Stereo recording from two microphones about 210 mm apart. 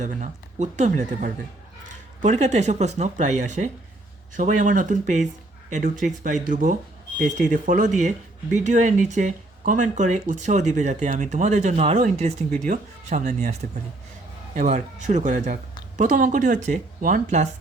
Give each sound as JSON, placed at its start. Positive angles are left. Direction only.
{"t": 0.0, "sound": "speech", "side_deg": -35}